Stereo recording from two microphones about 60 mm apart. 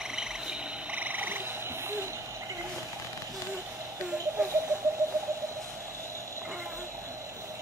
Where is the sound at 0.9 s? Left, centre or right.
Right.